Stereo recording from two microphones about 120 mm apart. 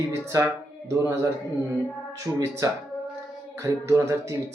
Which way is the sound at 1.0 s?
20° right (ahead or behind).